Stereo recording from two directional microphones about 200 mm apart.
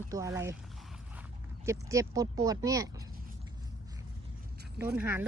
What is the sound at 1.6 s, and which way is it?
Speech, 15° right (ahead or behind).